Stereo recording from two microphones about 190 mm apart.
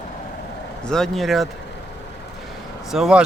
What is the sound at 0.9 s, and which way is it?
Speech, centre (ahead or behind).